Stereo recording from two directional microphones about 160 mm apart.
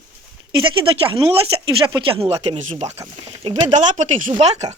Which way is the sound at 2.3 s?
40° right (ahead or behind).